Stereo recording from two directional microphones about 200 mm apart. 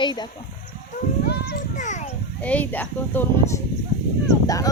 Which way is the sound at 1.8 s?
40° left (ahead or behind).